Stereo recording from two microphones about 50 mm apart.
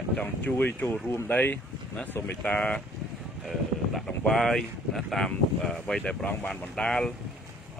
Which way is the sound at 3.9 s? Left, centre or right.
Centre.